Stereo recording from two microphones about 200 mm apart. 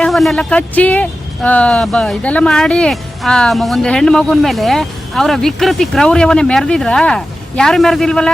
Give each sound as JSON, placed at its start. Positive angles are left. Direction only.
{"t": 0.0, "sound": "speech", "side_deg": 0}